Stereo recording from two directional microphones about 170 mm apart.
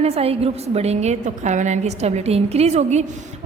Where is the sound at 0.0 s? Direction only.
35° right (ahead or behind).